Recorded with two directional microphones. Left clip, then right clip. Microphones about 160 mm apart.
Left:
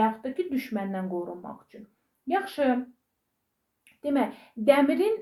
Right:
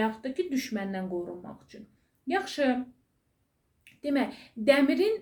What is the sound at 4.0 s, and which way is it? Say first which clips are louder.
A woman's voice: left 2 dB; 20° right (ahead or behind).